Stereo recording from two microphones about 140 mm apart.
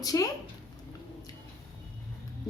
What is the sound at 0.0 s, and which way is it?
Speech, 25° left (ahead or behind).